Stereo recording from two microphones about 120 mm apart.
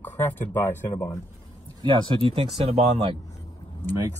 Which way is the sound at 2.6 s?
60° right (ahead or behind).